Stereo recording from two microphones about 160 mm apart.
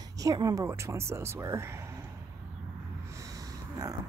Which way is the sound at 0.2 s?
20° right (ahead or behind).